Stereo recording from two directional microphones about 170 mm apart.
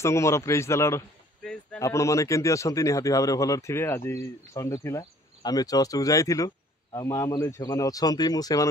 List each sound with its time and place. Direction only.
0.0 s a man's voice: 15° left (ahead or behind)
1.4 s a sound: 5° left (ahead or behind)
1.8 s speech: 15° left (ahead or behind)